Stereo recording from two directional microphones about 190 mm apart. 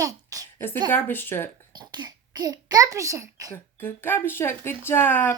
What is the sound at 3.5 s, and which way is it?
Speech, 10° left (ahead or behind).